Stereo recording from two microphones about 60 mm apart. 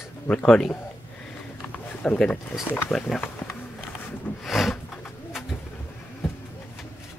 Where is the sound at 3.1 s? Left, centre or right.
Left.